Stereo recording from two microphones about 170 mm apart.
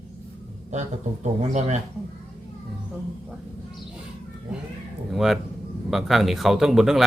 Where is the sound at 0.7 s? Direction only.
45° right (ahead or behind).